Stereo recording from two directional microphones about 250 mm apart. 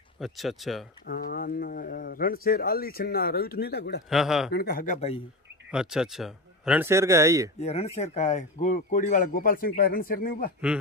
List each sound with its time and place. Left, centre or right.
0.2 s speech: centre
1.0 s speech: left
4.1 s speech: centre
4.5 s speech: left
5.7 s speech: centre
7.5 s speech: left